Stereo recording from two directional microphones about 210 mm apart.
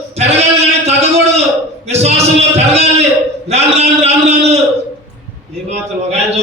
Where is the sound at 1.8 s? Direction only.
30° right (ahead or behind).